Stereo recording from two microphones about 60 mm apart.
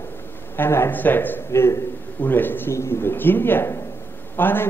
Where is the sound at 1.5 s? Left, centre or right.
Left.